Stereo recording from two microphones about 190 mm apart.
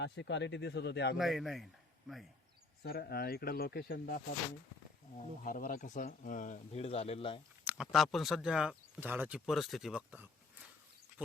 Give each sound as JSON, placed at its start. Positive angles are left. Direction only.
{"t": 0.0, "sound": "speech", "side_deg": 70}
{"t": 1.1, "sound": "a man's voice", "side_deg": 0}
{"t": 2.8, "sound": "speech", "side_deg": 55}
{"t": 5.4, "sound": "speech", "side_deg": 45}
{"t": 7.7, "sound": "speech", "side_deg": 0}